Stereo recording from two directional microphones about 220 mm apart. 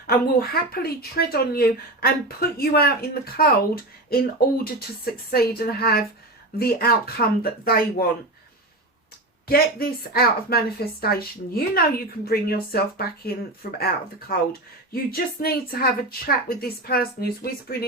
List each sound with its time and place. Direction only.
0.1 s speech: 45° left (ahead or behind)
9.5 s speech: 45° left (ahead or behind)